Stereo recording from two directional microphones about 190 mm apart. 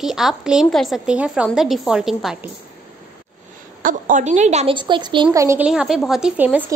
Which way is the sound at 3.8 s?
45° right (ahead or behind).